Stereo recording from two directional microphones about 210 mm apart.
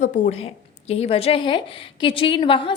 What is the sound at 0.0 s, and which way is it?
A woman's voice, 35° left (ahead or behind).